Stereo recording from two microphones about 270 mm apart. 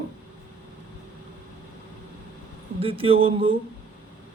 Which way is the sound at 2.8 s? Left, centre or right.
Right.